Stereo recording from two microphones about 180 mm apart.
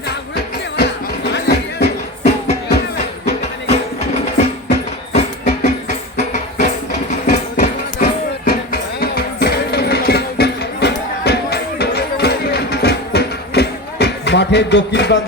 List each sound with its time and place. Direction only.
0.1 s music: 65° left (ahead or behind)
3.7 s music: 35° left (ahead or behind)
8.4 s music: 60° left (ahead or behind)